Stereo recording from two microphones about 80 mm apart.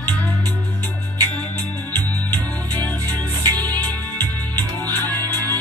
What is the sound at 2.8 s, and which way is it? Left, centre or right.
Music, left.